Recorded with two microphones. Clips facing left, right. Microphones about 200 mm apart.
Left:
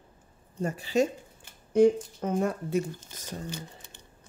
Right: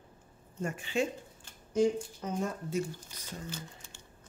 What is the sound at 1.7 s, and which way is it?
Speech, 55° left (ahead or behind).